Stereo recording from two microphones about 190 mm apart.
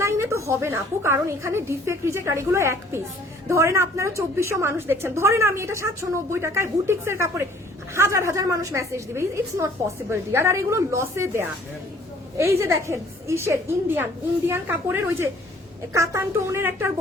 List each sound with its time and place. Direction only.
0.0 s a woman's voice: 15° right (ahead or behind)